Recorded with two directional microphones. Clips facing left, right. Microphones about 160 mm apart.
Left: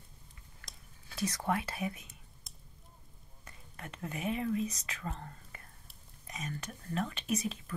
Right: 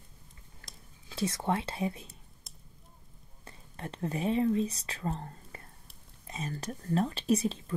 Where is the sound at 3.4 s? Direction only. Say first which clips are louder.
Right 6 dB; 30° right (ahead or behind).